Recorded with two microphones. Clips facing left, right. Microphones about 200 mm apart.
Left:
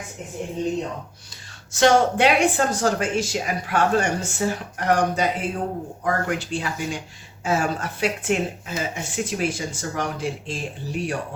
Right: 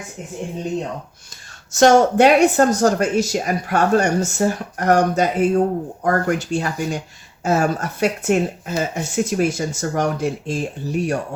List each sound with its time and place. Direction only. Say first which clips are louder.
1.7 s speech: right 5 dB; 45° right (ahead or behind)